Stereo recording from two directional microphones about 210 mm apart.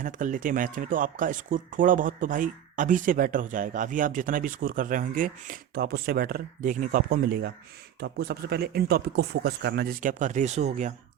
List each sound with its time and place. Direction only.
0.0 s speech: 40° right (ahead or behind)